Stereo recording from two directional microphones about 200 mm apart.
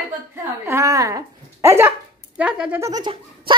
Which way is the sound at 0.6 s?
15° right (ahead or behind).